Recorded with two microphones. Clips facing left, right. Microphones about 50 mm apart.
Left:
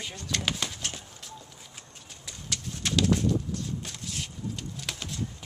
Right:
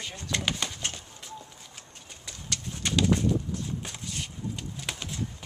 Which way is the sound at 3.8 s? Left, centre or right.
Centre.